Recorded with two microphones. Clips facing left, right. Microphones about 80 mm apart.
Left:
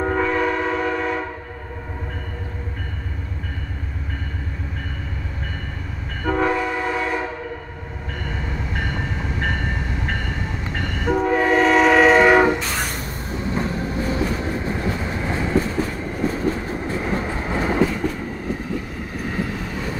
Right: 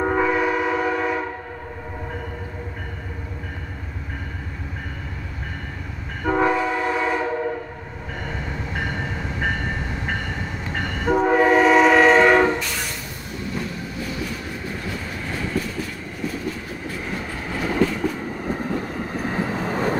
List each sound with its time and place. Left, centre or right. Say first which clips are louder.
0.0 s train: even; centre
6.2 s train: right 1 dB; centre
11.1 s train: right 2 dB; centre
12.5 s vehicle: left 3 dB; left
13.4 s train: left 5 dB; left
18.5 s vehicle: right 3 dB; right